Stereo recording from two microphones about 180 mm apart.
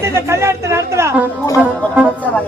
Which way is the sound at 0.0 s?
15° right (ahead or behind).